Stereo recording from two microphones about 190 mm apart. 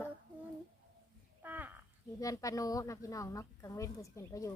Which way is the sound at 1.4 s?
10° right (ahead or behind).